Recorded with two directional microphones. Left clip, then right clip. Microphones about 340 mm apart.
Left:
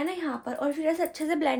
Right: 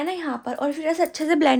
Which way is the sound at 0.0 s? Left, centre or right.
Right.